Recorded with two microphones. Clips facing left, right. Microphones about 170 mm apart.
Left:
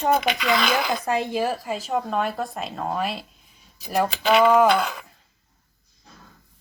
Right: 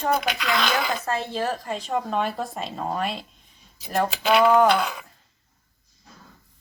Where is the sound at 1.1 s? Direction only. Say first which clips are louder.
Left 3 dB; 15° left (ahead or behind).